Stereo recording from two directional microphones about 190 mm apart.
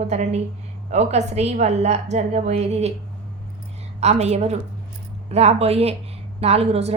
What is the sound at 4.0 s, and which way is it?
A woman's voice, 35° right (ahead or behind).